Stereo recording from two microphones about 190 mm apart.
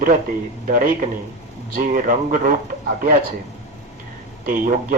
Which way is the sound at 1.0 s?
45° right (ahead or behind).